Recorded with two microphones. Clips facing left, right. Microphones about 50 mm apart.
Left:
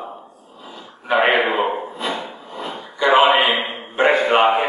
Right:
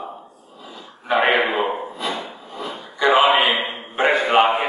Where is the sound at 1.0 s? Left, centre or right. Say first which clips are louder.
Left 1 dB; centre.